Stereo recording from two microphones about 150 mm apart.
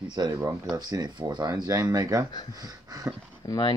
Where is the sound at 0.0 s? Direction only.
30° right (ahead or behind).